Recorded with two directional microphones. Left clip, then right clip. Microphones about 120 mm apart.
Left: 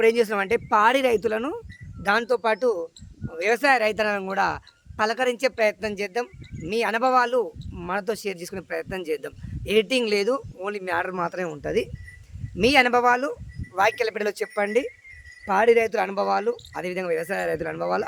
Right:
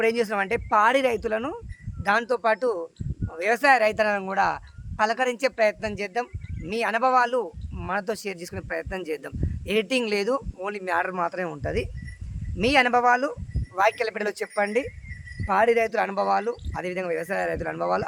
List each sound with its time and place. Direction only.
0.0 s speech: 30° left (ahead or behind)
12.5 s speech: 35° left (ahead or behind)